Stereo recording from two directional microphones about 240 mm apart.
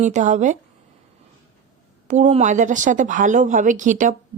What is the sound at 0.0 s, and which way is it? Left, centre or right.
Speech, right.